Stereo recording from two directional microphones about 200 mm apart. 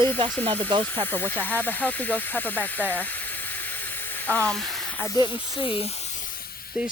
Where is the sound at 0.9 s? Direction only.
10° left (ahead or behind).